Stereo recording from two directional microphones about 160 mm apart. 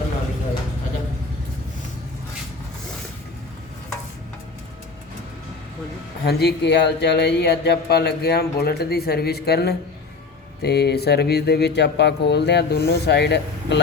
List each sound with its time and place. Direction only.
6.2 s speech: 90° left